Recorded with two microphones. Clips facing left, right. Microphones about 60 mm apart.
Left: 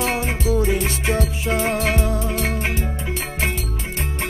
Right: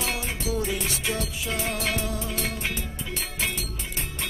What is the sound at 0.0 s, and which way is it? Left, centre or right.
Music, left.